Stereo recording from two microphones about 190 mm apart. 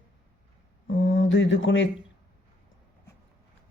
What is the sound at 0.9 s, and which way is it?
Mantra, 80° left.